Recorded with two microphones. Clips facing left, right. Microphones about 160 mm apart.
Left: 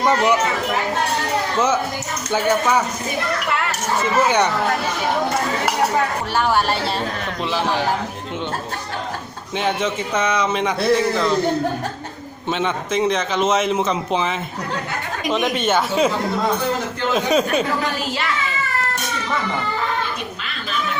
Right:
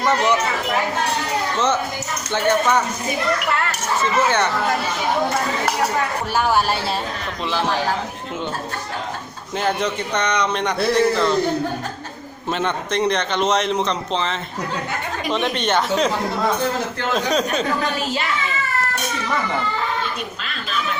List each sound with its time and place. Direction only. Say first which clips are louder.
0.0 s speech: left 2 dB; 10° left (ahead or behind)
1.5 s speech: left 2 dB; 10° left (ahead or behind)
4.3 s speech: left 2 dB; 15° left (ahead or behind)
6.3 s a man's voice: even; centre (ahead or behind)
9.6 s a man's voice: even; centre (ahead or behind)
12.5 s a man's voice: left 1 dB; centre (ahead or behind)
17.2 s a man's voice: left 3 dB; 5° left (ahead or behind)